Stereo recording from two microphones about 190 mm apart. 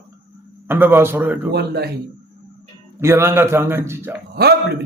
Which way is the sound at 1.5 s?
55° right (ahead or behind).